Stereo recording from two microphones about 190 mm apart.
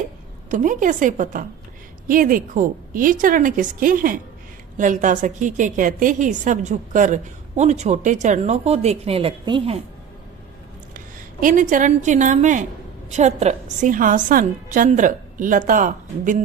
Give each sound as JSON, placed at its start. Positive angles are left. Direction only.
{"t": 0.5, "sound": "a woman's voice", "side_deg": -40}
{"t": 10.9, "sound": "a woman's voice", "side_deg": -45}